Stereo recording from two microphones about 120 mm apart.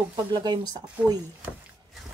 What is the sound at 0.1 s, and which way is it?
Speech, 35° right (ahead or behind).